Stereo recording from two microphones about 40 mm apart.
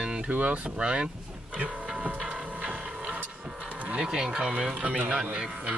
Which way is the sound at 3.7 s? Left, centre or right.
Right.